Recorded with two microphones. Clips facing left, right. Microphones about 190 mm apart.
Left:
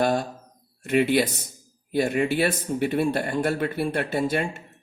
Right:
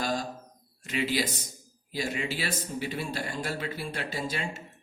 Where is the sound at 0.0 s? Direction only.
60° left (ahead or behind).